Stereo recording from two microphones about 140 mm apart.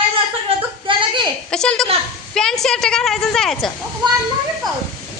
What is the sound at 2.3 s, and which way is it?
A woman's voice, 5° left (ahead or behind).